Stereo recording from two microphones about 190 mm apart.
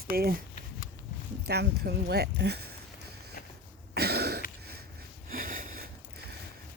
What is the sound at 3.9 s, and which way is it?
Cough, 55° right (ahead or behind).